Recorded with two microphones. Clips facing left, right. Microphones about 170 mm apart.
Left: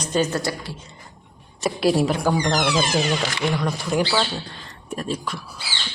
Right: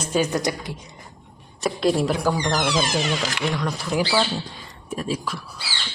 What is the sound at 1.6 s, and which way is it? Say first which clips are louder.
Speech: left 1 dB; 5° left (ahead or behind).